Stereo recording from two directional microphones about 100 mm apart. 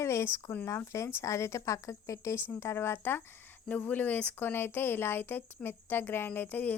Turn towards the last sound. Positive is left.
turn(degrees=15)  # may be behind; listen again after turning